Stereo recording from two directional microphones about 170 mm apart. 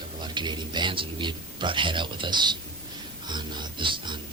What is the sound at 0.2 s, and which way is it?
Speech, 25° right (ahead or behind).